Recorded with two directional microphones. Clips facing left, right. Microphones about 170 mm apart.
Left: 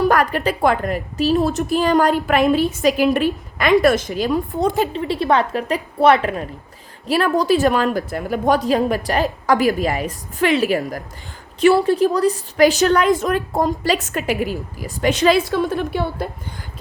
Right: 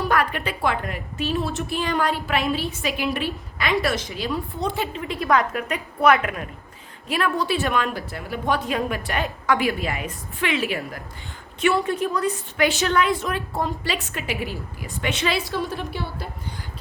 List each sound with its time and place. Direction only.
0.1 s a woman's voice: 40° left (ahead or behind)
4.9 s a woman's voice: 30° left (ahead or behind)
15.7 s a woman's voice: 55° left (ahead or behind)